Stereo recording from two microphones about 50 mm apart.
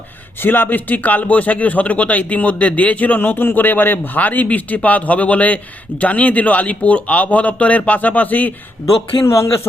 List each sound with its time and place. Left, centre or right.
0.3 s speech: left
3.2 s speech: left
9.2 s speech: left